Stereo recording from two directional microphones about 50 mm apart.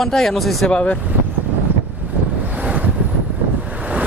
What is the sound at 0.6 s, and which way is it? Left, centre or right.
Speech, centre.